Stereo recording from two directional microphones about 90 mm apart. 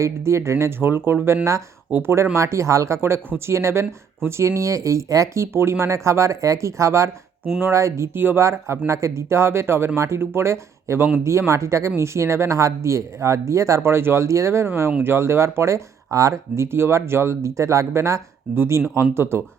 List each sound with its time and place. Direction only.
0.0 s speech: 30° right (ahead or behind)